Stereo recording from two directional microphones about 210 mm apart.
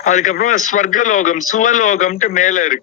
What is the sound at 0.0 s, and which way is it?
A man's voice, 35° left (ahead or behind).